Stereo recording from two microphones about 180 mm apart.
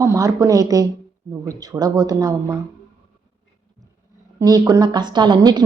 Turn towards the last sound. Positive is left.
turn(degrees=-25)  # may be behind; listen again after turning